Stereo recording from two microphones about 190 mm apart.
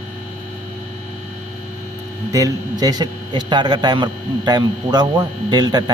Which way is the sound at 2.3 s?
20° right (ahead or behind).